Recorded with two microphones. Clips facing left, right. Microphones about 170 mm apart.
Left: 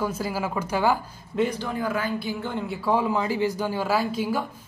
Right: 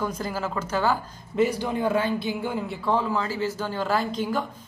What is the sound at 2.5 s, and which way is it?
A woman's voice, centre (ahead or behind).